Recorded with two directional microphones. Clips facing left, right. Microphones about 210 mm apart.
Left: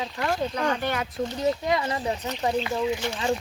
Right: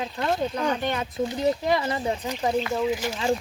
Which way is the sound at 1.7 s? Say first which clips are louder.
Right 1 dB; 30° right (ahead or behind).